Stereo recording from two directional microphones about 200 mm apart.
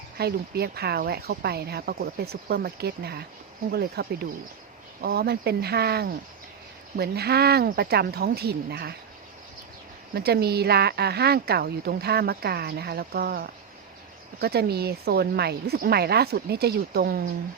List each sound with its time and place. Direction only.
0.2 s a woman's voice: 50° right (ahead or behind)
10.2 s a woman's voice: 50° right (ahead or behind)